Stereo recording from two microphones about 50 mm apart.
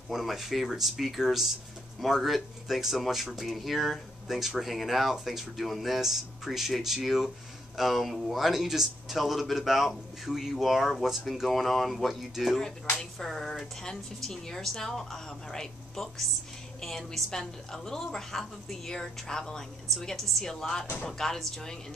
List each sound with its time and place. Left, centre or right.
0.1 s a woman's voice: centre